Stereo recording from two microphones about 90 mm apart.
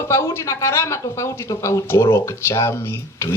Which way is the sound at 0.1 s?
30° left (ahead or behind).